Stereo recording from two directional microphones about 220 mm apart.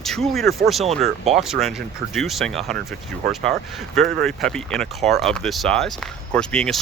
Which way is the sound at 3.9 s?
Centre (ahead or behind).